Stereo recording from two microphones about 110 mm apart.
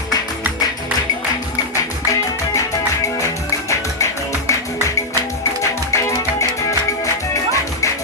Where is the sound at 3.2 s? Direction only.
25° left (ahead or behind).